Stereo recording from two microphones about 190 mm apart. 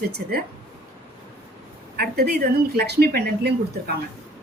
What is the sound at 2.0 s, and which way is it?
A woman's voice, 55° right (ahead or behind).